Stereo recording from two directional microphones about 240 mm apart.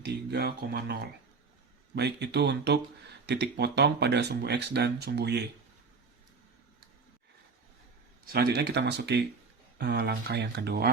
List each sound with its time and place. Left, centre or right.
0.0 s speech: right
8.3 s speech: right